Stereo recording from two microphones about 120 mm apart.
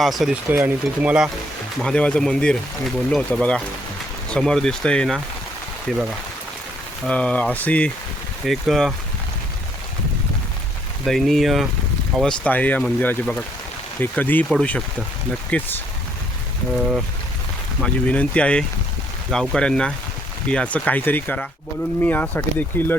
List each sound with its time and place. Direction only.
0.0 s speech: centre (ahead or behind)
0.5 s speech: 15° right (ahead or behind)
1.8 s speech: 5° left (ahead or behind)
7.1 s speech: 10° left (ahead or behind)
8.4 s speech: centre (ahead or behind)
11.0 s speech: centre (ahead or behind)
17.7 s speech: 10° left (ahead or behind)